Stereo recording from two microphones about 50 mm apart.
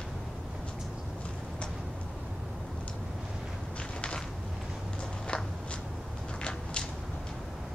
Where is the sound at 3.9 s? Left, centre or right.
Centre.